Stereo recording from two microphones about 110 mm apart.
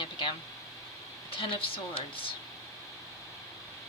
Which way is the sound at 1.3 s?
55° left (ahead or behind).